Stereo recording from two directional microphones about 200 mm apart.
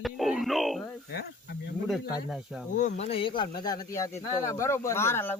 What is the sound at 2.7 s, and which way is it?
Speech, 35° left (ahead or behind).